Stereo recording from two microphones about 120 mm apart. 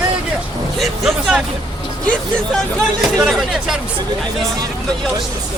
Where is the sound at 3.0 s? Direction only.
Centre (ahead or behind).